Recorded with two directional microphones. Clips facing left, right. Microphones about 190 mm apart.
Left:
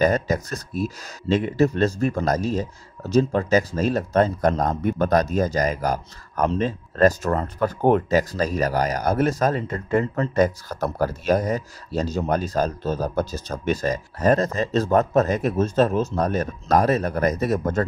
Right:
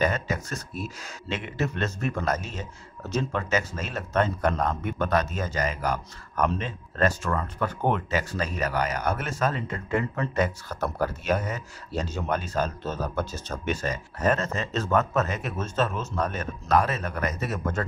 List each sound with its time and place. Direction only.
0.0 s speech: 40° left (ahead or behind)